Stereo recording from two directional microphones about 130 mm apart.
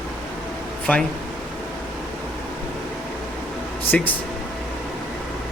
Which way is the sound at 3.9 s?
10° left (ahead or behind).